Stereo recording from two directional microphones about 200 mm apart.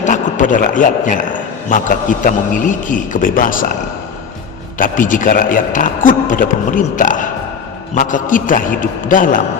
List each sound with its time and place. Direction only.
0.0 s a man's voice: 40° left (ahead or behind)
4.8 s a man's voice: 40° left (ahead or behind)